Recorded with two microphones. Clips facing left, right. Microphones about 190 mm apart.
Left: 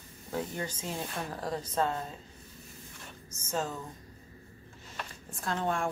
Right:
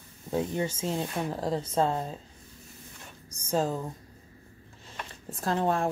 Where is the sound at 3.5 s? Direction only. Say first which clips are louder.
Right 6 dB; 35° right (ahead or behind).